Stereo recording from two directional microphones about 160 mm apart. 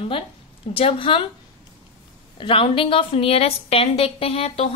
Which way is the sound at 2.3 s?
30° left (ahead or behind).